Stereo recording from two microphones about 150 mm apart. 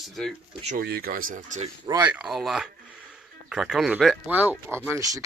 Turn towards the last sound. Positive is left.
turn(degrees=-20)  # may be behind; listen again after turning